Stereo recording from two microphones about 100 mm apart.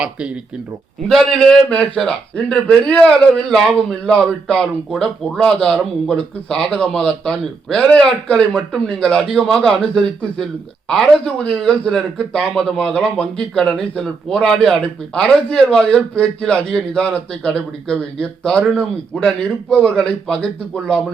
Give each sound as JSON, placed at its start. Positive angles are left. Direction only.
{"t": 0.0, "sound": "speech", "side_deg": -10}
{"t": 1.0, "sound": "a man's voice", "side_deg": 0}